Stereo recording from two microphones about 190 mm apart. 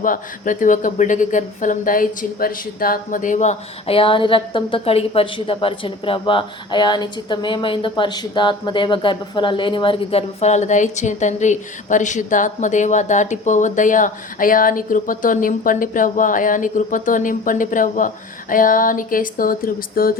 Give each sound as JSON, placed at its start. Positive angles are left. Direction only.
{"t": 0.0, "sound": "speech", "side_deg": 45}